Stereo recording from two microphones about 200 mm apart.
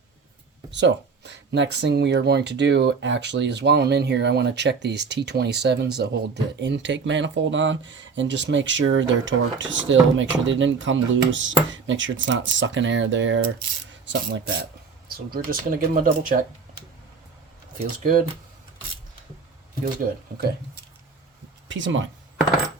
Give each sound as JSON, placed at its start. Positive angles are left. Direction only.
{"t": 0.7, "sound": "speech", "side_deg": -60}
{"t": 18.0, "sound": "speech", "side_deg": -45}
{"t": 19.8, "sound": "speech", "side_deg": -45}
{"t": 21.7, "sound": "speech", "side_deg": -65}